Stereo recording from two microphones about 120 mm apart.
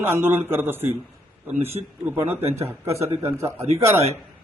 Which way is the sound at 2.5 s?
20° right (ahead or behind).